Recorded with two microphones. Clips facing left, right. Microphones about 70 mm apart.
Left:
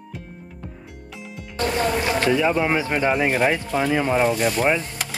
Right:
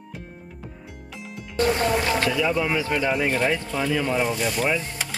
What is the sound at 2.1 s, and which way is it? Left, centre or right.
Boat, left.